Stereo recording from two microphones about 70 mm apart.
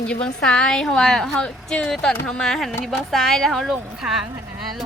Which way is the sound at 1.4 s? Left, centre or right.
Centre.